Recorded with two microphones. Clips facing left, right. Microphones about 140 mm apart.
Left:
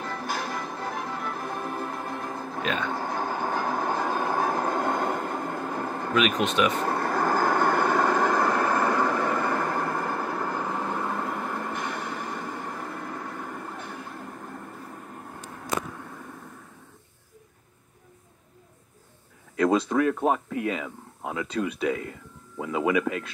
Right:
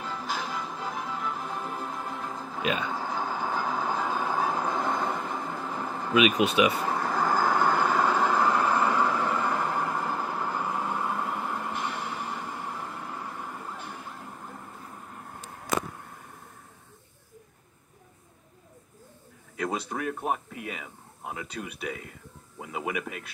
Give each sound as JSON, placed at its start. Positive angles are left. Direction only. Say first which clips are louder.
{"t": 0.0, "sound": "music", "louder": "left 2 dB", "side_deg": 75}
{"t": 2.6, "sound": "speech", "louder": "even", "side_deg": -10}
{"t": 2.9, "sound": "train", "louder": "left 2 dB", "side_deg": 70}
{"t": 6.1, "sound": "speech", "louder": "right 2 dB", "side_deg": -10}
{"t": 6.8, "sound": "vehicle", "louder": "left 2 dB", "side_deg": 65}
{"t": 10.9, "sound": "train", "louder": "left 1 dB", "side_deg": 50}
{"t": 19.5, "sound": "speech", "louder": "left 9 dB", "side_deg": 90}